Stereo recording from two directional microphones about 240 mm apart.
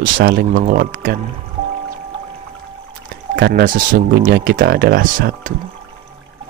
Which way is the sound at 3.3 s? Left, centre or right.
Right.